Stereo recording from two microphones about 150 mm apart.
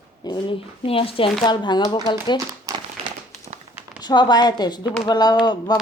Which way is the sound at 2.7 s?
25° right (ahead or behind).